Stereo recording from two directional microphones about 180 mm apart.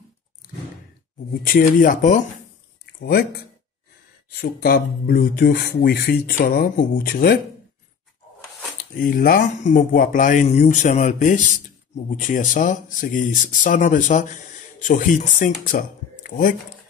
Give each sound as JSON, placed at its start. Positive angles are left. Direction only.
{"t": 1.4, "sound": "speech", "side_deg": 50}
{"t": 3.0, "sound": "speech", "side_deg": 60}
{"t": 9.0, "sound": "speech", "side_deg": 55}